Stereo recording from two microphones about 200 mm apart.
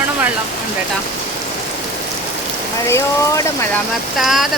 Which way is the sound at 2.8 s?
15° left (ahead or behind).